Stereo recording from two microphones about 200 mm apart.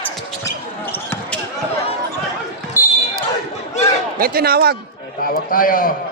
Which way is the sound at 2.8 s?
10° right (ahead or behind).